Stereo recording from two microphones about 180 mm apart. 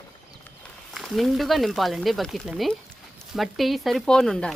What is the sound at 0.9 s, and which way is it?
Speech, centre (ahead or behind).